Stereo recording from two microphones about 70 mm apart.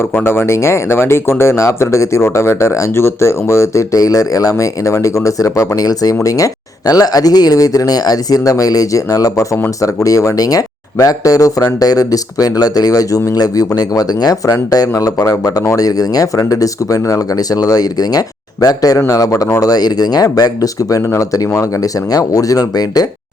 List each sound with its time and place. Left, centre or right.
0.3 s speech: left